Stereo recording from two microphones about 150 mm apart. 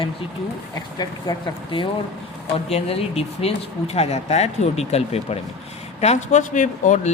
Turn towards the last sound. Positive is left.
turn(degrees=55)  # may be behind; listen again after turning